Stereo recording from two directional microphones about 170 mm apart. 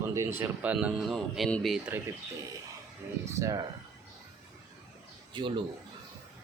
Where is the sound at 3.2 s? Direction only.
20° right (ahead or behind).